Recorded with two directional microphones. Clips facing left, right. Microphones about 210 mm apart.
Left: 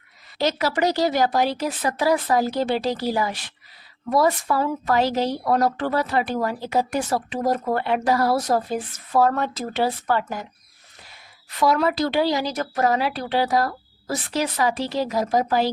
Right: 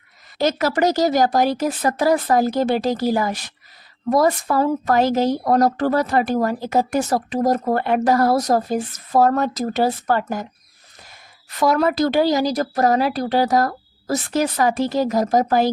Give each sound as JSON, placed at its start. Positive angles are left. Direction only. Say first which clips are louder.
{"t": 0.3, "sound": "a woman's voice", "louder": "right 3 dB", "side_deg": -50}
{"t": 11.6, "sound": "a woman's voice", "louder": "right 3 dB", "side_deg": -45}